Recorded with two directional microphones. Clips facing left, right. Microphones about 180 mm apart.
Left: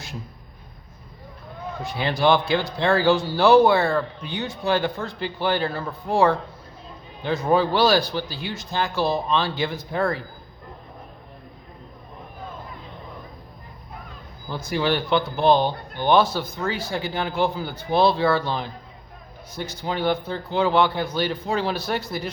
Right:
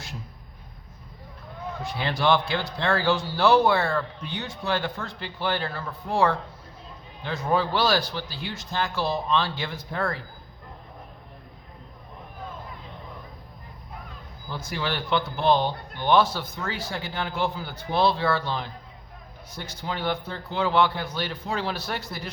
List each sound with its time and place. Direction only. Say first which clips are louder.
2.0 s speech: left 3 dB; 10° left (ahead or behind)
7.5 s speech: left 4 dB; 15° left (ahead or behind)
14.5 s speech: left 7 dB; 15° left (ahead or behind)